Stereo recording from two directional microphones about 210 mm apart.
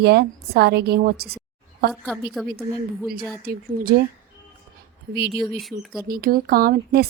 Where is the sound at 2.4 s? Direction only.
Centre (ahead or behind).